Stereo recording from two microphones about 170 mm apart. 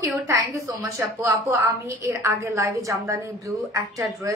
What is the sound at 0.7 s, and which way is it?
A woman's voice, 15° right (ahead or behind).